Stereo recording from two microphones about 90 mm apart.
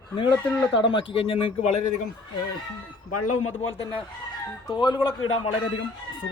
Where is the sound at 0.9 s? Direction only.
85° left.